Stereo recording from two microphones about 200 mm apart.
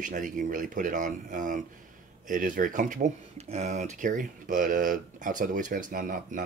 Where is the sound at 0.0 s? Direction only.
40° right (ahead or behind).